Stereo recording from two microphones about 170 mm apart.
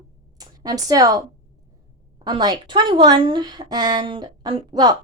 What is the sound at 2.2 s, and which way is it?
A woman's voice, 25° right (ahead or behind).